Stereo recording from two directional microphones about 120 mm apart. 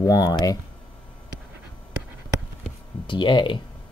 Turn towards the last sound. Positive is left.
turn(degrees=40)  # may be behind; listen again after turning